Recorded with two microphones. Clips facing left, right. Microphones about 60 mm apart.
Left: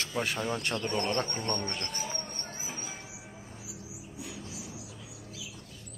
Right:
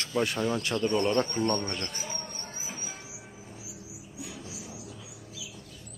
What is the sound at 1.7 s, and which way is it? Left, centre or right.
Bird, centre.